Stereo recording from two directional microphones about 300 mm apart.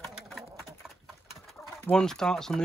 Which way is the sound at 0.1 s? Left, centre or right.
Centre.